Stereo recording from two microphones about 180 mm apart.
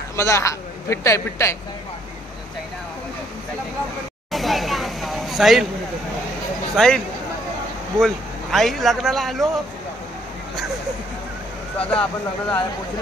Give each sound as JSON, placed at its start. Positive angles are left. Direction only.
{"t": 0.1, "sound": "speech", "side_deg": 15}
{"t": 4.3, "sound": "a sound", "side_deg": 0}
{"t": 6.8, "sound": "speech", "side_deg": 0}
{"t": 8.0, "sound": "speech", "side_deg": 0}
{"t": 11.8, "sound": "speech", "side_deg": 5}